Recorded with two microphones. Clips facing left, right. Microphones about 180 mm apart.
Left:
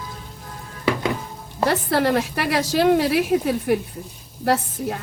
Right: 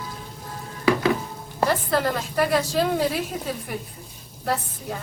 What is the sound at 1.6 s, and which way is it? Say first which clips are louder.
A woman's voice: left 3 dB; 70° left (ahead or behind).